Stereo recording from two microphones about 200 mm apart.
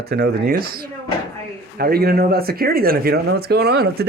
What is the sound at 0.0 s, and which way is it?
Speech, 55° right (ahead or behind).